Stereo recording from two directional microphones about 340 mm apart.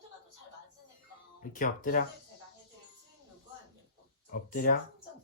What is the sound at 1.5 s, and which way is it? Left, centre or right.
Speech, left.